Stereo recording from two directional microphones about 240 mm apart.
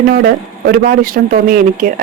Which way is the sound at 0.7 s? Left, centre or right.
Right.